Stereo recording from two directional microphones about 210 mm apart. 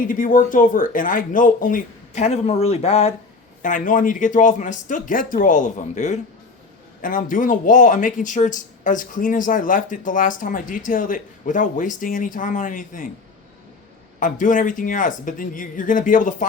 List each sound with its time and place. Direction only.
0.1 s speech: 40° left (ahead or behind)
3.6 s speech: 40° left (ahead or behind)
14.2 s speech: 40° left (ahead or behind)